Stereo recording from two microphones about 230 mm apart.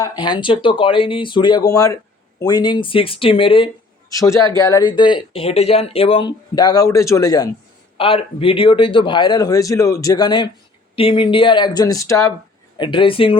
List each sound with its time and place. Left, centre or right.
0.0 s speech: centre